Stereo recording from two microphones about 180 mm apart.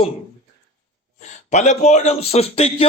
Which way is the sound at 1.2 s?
40° left (ahead or behind).